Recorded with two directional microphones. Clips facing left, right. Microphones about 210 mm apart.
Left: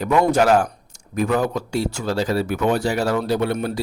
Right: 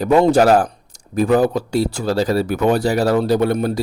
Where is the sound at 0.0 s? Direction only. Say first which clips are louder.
Right 4 dB; 30° right (ahead or behind).